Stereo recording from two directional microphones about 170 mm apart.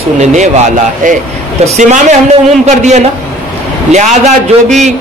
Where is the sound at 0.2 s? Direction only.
45° right (ahead or behind).